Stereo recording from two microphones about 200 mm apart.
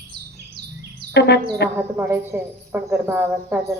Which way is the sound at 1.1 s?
60° left (ahead or behind).